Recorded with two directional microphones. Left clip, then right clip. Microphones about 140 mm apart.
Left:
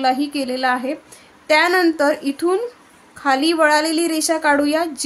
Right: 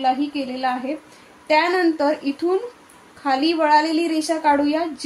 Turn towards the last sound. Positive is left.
turn(degrees=45)  # may be behind; listen again after turning